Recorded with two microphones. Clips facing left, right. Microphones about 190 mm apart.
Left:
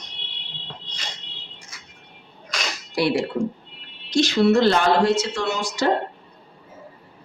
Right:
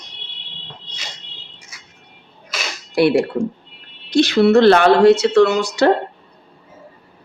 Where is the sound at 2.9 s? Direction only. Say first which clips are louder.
Right 7 dB; 60° right (ahead or behind).